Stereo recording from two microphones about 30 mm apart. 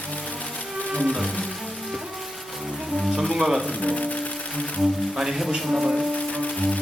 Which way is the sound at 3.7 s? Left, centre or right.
Left.